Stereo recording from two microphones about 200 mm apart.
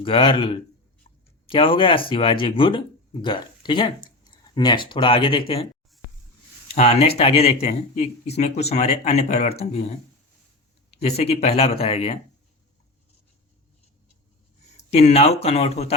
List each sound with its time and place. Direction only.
0.0 s speech: 25° left (ahead or behind)
6.7 s speech: 30° left (ahead or behind)
14.8 s speech: 30° left (ahead or behind)